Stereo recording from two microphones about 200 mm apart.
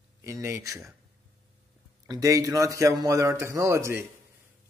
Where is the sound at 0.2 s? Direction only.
15° right (ahead or behind).